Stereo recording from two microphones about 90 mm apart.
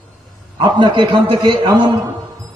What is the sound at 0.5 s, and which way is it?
A man's voice, 60° right (ahead or behind).